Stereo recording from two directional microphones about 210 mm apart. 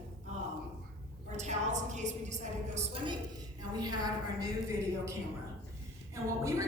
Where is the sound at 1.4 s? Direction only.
35° right (ahead or behind).